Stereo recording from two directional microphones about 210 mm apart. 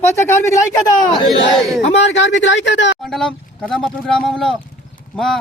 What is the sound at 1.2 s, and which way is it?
Speech, centre (ahead or behind).